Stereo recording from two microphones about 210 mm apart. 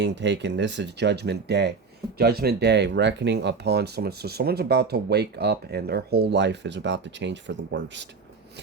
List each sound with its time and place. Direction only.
0.0 s speech: 55° right (ahead or behind)